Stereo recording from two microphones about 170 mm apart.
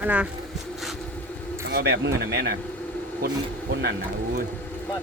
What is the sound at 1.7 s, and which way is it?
Speech, 85° right.